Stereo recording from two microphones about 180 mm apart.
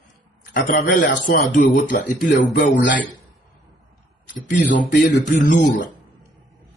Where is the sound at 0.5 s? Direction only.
50° left (ahead or behind).